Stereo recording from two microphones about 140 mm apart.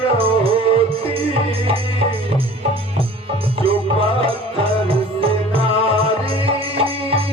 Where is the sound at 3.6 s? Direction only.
40° right (ahead or behind).